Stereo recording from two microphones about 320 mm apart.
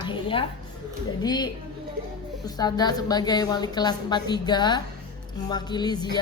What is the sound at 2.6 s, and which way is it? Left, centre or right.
Speech, centre.